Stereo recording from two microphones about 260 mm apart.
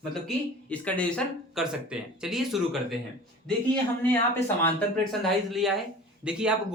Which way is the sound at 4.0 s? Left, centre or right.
Centre.